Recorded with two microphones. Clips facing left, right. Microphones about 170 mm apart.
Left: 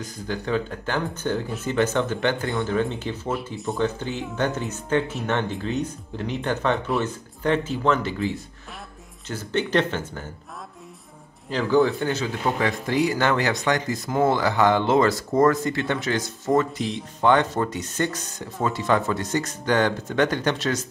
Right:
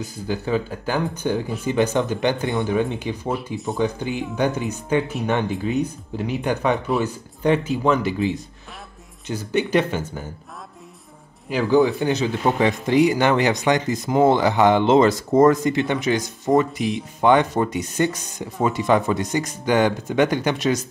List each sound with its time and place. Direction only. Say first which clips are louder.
0.0 s speech: right 3 dB; 10° right (ahead or behind)
11.4 s speech: right 2 dB; 10° right (ahead or behind)